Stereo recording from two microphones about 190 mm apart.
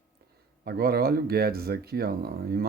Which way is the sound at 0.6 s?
55° right (ahead or behind).